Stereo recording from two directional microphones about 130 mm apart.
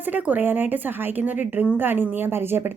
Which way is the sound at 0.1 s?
15° right (ahead or behind).